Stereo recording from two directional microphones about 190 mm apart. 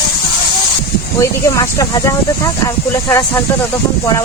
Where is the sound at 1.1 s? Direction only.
15° left (ahead or behind).